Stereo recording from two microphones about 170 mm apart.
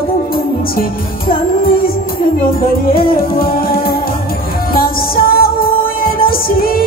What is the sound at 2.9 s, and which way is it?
Music, 60° left (ahead or behind).